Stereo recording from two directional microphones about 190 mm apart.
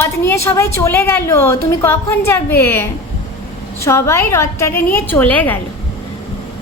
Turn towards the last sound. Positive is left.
turn(degrees=10)  # may be behind; listen again after turning